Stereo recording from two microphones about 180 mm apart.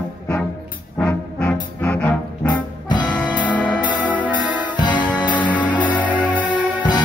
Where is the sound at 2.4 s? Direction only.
25° left (ahead or behind).